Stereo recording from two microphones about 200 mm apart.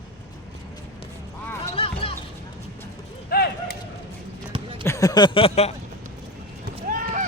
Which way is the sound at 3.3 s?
50° left (ahead or behind).